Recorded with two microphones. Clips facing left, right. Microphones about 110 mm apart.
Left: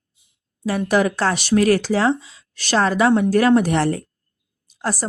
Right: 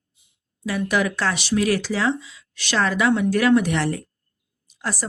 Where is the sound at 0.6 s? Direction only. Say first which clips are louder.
Left 4 dB; 40° left (ahead or behind).